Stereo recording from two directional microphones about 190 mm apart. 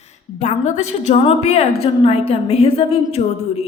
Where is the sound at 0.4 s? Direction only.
40° left (ahead or behind).